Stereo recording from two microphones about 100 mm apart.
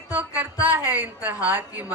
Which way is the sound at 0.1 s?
15° right (ahead or behind).